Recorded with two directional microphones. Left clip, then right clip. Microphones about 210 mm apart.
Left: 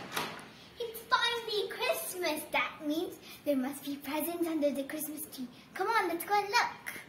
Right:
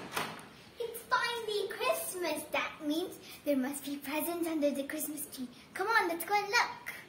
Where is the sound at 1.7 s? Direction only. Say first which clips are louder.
Even; 20° right (ahead or behind).